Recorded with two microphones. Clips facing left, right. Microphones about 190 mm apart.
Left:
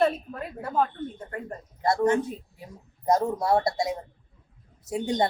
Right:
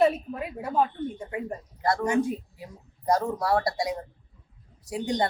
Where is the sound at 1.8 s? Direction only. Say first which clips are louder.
Left 2 dB; 25° left (ahead or behind).